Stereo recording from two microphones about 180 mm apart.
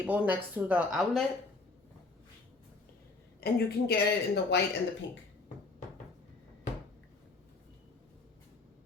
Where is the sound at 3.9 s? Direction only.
65° left (ahead or behind).